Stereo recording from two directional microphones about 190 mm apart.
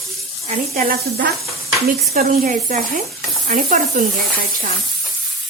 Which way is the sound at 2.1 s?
35° right (ahead or behind).